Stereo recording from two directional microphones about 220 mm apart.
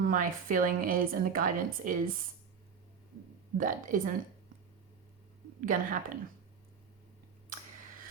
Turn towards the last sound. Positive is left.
turn(degrees=-35)  # may be behind; listen again after turning